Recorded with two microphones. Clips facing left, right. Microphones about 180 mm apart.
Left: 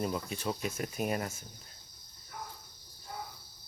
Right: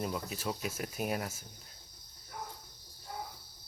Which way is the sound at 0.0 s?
5° right (ahead or behind).